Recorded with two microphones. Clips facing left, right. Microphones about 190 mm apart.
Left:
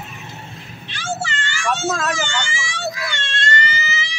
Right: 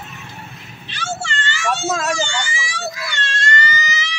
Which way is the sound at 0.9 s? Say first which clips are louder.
Left 1 dB; centre (ahead or behind).